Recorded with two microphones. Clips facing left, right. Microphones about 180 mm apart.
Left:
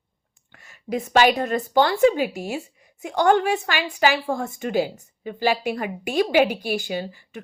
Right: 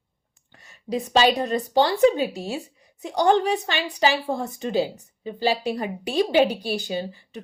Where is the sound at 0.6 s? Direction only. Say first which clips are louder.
Even; 30° right (ahead or behind).